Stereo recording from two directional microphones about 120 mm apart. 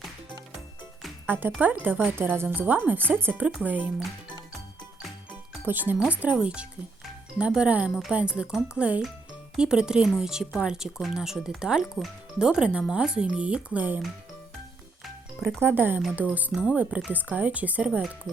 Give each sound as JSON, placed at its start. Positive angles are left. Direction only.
{"t": 1.3, "sound": "speech", "side_deg": -15}
{"t": 5.6, "sound": "speech", "side_deg": -15}
{"t": 15.6, "sound": "speech", "side_deg": -15}